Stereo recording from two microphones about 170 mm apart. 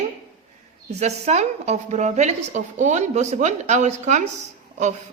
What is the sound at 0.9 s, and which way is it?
A woman's voice, 40° right (ahead or behind).